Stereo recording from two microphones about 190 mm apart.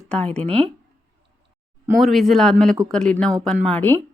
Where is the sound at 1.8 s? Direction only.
Centre (ahead or behind).